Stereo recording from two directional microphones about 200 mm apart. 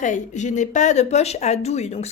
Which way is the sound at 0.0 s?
40° left (ahead or behind).